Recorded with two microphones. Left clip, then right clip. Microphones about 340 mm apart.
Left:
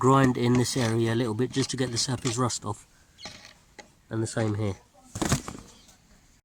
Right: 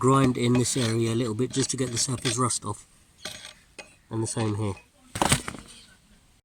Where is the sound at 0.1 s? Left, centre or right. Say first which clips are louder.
Left 1 dB; left.